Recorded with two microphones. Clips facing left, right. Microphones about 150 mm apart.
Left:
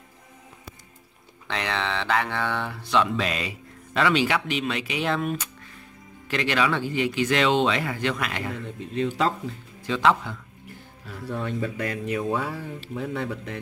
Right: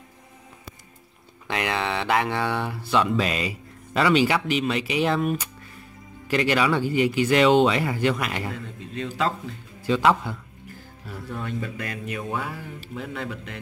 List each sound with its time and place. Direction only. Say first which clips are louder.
1.5 s speech: right 2 dB; 10° right (ahead or behind)
6.5 s speech: right 1 dB; 5° right (ahead or behind)
6.8 s speech: right 4 dB; 50° right (ahead or behind)
7.1 s speech: right 4 dB; 5° right (ahead or behind)
8.6 s speech: left 5 dB; 30° left (ahead or behind)
9.8 s a man's voice: right 2 dB; 5° right (ahead or behind)
11.4 s speech: left 4 dB; 25° left (ahead or behind)